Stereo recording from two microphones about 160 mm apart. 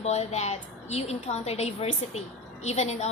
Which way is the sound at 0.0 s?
40° left (ahead or behind).